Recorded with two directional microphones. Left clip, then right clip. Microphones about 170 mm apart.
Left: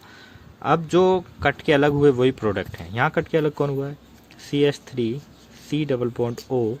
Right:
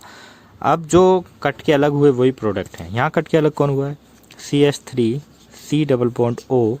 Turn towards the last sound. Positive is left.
turn(degrees=-40)  # may be behind; listen again after turning